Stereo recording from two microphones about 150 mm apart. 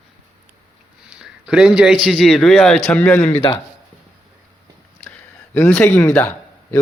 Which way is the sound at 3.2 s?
40° left (ahead or behind).